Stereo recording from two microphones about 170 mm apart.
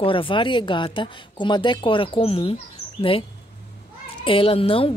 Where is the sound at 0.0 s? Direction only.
30° left (ahead or behind).